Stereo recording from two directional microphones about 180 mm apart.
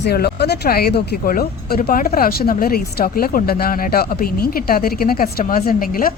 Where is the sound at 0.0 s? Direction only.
65° left (ahead or behind).